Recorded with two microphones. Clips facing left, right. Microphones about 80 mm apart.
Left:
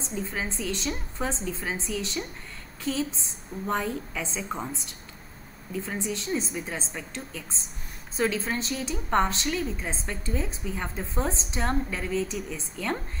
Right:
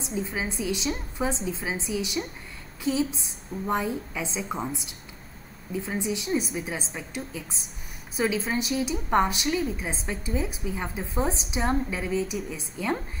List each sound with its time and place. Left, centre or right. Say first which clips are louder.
0.0 s a woman's voice: right 2 dB; centre